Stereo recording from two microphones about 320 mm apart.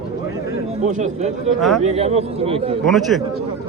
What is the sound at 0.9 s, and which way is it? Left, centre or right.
A man's voice, right.